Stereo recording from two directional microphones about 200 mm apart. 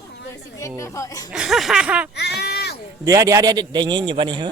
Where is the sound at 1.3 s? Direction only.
Centre (ahead or behind).